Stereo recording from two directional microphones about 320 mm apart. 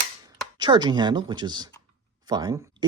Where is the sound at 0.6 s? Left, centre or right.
Centre.